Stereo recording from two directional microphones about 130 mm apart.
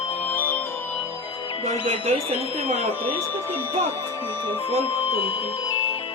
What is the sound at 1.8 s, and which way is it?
Speech, 55° right (ahead or behind).